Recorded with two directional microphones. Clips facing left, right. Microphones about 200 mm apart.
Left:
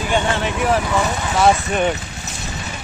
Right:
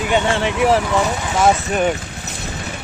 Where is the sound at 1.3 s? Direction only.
5° right (ahead or behind).